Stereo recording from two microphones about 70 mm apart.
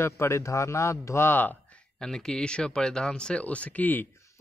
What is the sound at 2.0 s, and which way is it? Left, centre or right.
Speech, centre.